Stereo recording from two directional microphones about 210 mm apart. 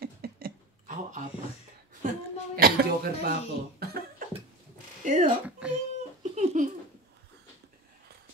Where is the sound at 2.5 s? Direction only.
45° right (ahead or behind).